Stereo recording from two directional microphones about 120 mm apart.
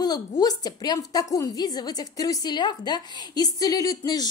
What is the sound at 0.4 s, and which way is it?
A woman's voice, 35° left (ahead or behind).